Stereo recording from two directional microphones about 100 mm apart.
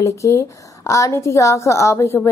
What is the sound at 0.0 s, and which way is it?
A woman's voice, 30° left (ahead or behind).